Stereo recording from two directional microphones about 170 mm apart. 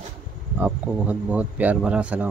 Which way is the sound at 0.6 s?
10° right (ahead or behind).